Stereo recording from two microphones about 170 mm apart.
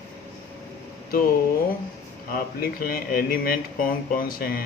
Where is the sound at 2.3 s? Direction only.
60° left (ahead or behind).